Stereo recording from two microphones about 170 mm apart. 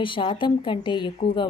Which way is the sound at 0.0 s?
30° left (ahead or behind).